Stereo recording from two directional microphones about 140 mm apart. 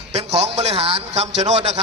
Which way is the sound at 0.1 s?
45° right (ahead or behind).